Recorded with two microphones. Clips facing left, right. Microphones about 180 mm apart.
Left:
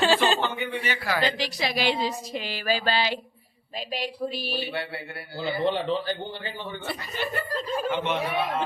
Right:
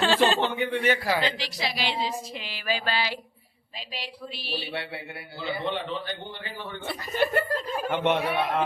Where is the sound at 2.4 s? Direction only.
45° left (ahead or behind); by 3.2 s 25° left (ahead or behind).